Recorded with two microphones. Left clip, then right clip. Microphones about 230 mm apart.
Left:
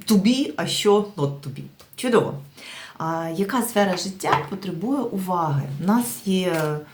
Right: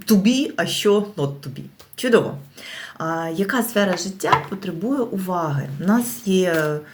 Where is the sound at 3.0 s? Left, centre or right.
Centre.